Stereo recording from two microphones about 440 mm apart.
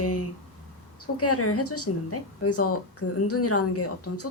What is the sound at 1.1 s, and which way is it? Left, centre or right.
A woman's voice, left.